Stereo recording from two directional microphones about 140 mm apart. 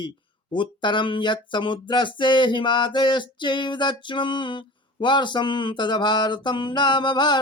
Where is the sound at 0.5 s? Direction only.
35° left (ahead or behind).